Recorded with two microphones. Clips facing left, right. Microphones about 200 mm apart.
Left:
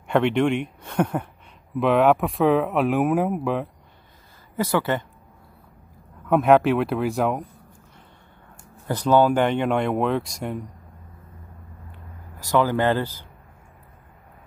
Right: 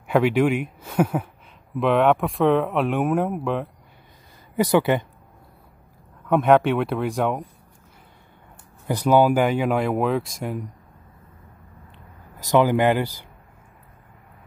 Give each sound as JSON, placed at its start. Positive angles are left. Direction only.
{"t": 0.1, "sound": "speech", "side_deg": -5}
{"t": 4.6, "sound": "speech", "side_deg": -15}
{"t": 6.2, "sound": "speech", "side_deg": 0}
{"t": 8.8, "sound": "speech", "side_deg": -10}
{"t": 12.4, "sound": "speech", "side_deg": -20}